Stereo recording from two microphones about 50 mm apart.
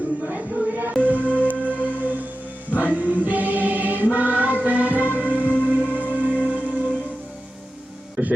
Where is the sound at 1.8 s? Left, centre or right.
Right.